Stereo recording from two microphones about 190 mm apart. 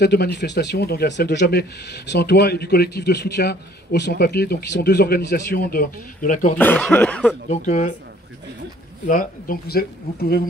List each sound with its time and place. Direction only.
0.0 s speech: 60° left (ahead or behind); by 6.6 s 45° left (ahead or behind)
6.6 s speech: 10° left (ahead or behind)
7.4 s speech: 40° left (ahead or behind)
9.0 s speech: 45° left (ahead or behind)